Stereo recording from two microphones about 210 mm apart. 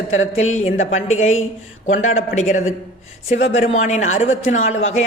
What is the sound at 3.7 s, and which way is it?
Speech, 35° left (ahead or behind).